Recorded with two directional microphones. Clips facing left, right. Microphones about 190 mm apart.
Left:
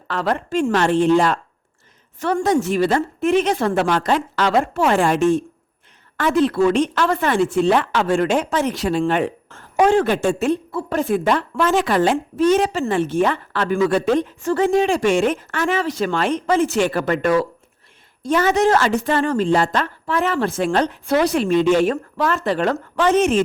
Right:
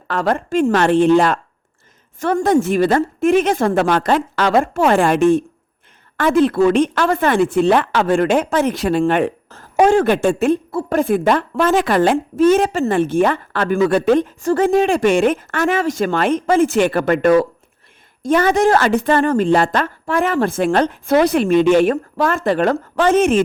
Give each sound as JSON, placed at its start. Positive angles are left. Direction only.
{"t": 0.1, "sound": "a woman's voice", "side_deg": -45}
{"t": 0.7, "sound": "a woman's voice", "side_deg": -60}
{"t": 2.1, "sound": "a woman's voice", "side_deg": -45}
{"t": 9.5, "sound": "a woman's voice", "side_deg": -40}